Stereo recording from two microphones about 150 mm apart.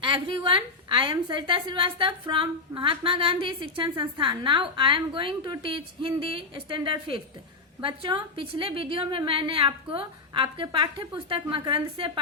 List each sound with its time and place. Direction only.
0.0 s a woman's voice: 35° right (ahead or behind)